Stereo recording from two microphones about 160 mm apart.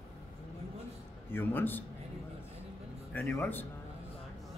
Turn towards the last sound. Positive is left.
turn(degrees=15)  # may be behind; listen again after turning